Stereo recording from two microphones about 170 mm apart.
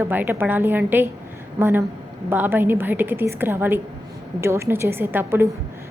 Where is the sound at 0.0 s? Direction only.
10° right (ahead or behind).